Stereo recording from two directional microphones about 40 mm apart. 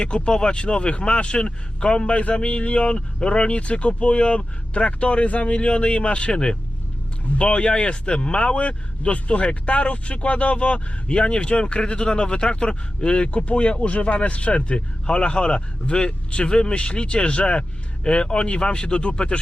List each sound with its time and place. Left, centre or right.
0.0 s speech: left